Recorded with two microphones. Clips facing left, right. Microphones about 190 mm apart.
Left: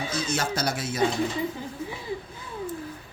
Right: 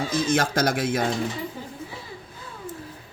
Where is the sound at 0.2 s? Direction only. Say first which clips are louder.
Right 6 dB; 55° right (ahead or behind).